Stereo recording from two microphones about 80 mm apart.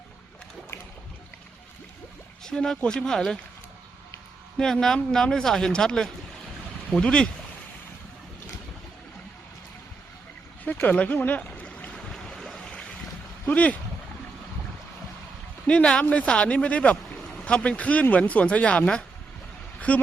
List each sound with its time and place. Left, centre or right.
2.4 s speech: centre
4.5 s a woman's voice: centre
10.7 s boat: centre
13.5 s speech: centre
15.6 s speech: centre